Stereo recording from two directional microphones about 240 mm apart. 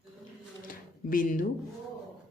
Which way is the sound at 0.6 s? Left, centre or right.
Left.